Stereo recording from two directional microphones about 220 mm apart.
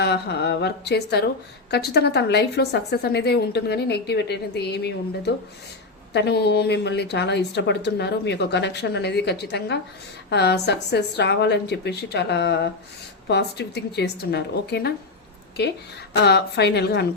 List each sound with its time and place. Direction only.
0.0 s a woman's voice: 50° left (ahead or behind)
16.2 s a woman's voice: 50° left (ahead or behind)